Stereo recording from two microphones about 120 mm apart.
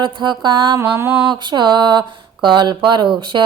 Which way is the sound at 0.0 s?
40° right (ahead or behind).